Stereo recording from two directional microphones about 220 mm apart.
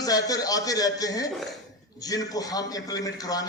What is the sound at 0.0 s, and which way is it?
A man's voice, 15° left (ahead or behind).